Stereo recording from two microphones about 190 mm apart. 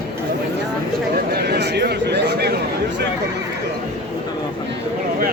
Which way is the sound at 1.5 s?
60° right (ahead or behind).